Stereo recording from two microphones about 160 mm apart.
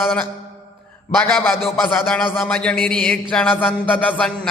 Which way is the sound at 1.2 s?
15° left (ahead or behind).